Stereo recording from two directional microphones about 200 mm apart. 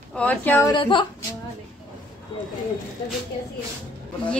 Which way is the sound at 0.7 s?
25° left (ahead or behind).